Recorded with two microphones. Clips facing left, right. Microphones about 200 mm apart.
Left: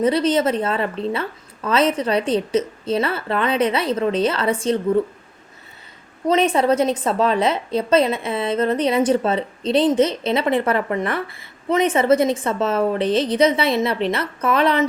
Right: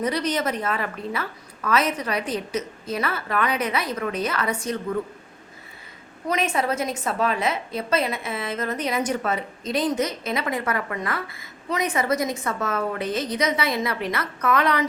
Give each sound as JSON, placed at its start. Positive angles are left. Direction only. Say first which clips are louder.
{"t": 0.0, "sound": "a woman's voice", "louder": "left 7 dB", "side_deg": 25}
{"t": 6.2, "sound": "a woman's voice", "louder": "left 7 dB", "side_deg": 30}